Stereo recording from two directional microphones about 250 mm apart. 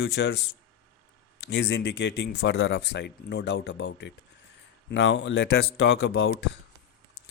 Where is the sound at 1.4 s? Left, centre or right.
Left.